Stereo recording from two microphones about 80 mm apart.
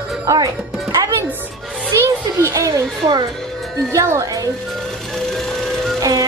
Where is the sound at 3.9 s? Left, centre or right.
Right.